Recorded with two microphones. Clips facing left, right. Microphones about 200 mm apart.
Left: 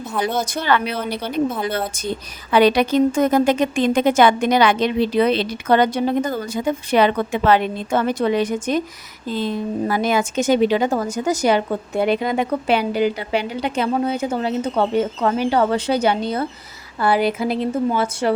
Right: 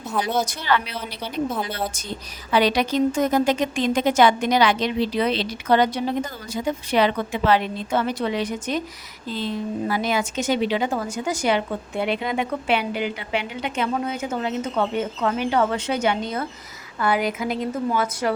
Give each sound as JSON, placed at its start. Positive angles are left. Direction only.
{"t": 0.4, "sound": "a woman's voice", "side_deg": 55}